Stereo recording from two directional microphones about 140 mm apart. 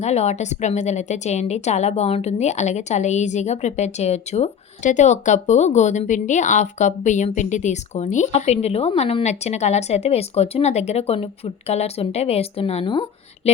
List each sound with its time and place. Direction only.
0.0 s a woman's voice: 50° left (ahead or behind); by 13.5 s 35° left (ahead or behind)